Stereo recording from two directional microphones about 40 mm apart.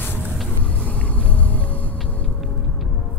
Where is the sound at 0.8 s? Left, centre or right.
Left.